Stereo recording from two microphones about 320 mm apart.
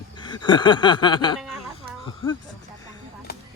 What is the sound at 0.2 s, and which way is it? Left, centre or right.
Speech, centre.